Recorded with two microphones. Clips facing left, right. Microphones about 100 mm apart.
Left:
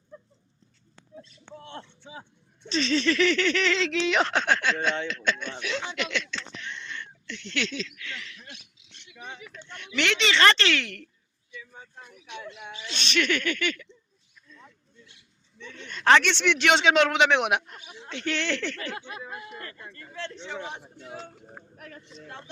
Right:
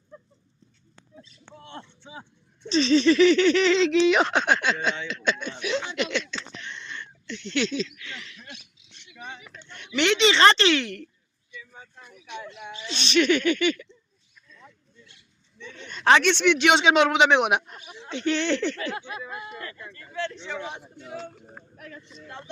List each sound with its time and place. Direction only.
2.6 s a man's voice: 25° right (ahead or behind)
6.0 s speech: 25° right (ahead or behind)
9.7 s speech: 25° right (ahead or behind)
12.9 s speech: 20° right (ahead or behind)
15.7 s a man's voice: 15° right (ahead or behind)
18.9 s speech: 55° right (ahead or behind)
19.5 s speech: 40° left (ahead or behind)